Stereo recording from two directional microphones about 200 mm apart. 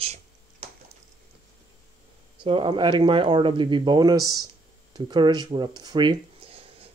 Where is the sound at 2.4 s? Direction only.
25° right (ahead or behind).